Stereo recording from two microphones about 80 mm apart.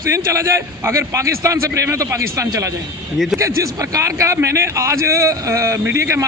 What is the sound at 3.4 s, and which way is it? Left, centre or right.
A man's voice, right.